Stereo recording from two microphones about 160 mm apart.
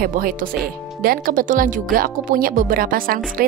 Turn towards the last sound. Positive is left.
turn(degrees=-60)  # may be behind; listen again after turning